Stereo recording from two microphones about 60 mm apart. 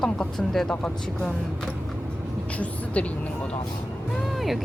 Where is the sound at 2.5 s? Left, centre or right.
Left.